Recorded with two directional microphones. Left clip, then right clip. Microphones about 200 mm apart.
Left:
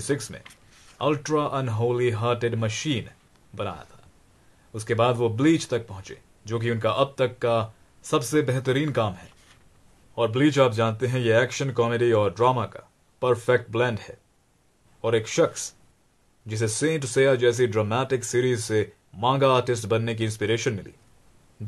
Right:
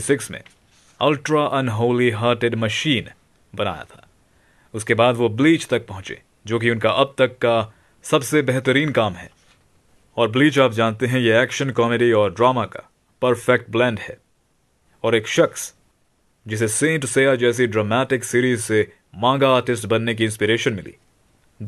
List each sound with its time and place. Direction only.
0.0 s speech: 30° right (ahead or behind)